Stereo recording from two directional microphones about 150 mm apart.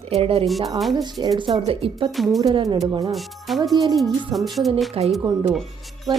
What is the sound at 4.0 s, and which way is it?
Music, centre (ahead or behind).